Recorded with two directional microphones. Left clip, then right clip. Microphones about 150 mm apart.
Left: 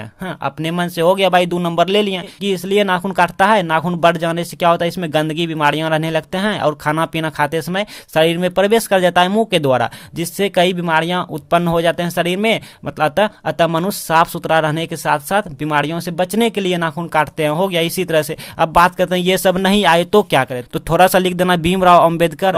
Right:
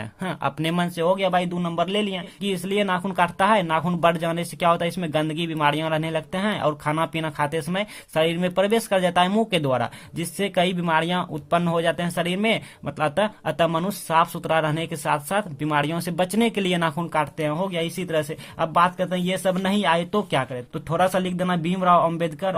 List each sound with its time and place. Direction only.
0.2 s speech: 20° left (ahead or behind)
0.9 s speech: 40° left (ahead or behind); by 17.2 s 25° left (ahead or behind)
17.2 s speech: 40° left (ahead or behind)